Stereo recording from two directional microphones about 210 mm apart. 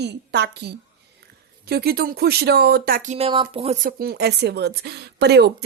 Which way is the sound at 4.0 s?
50° right (ahead or behind).